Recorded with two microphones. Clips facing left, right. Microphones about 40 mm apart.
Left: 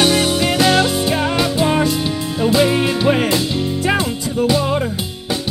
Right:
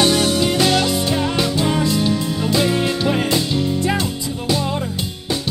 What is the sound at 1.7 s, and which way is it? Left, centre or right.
Music, left.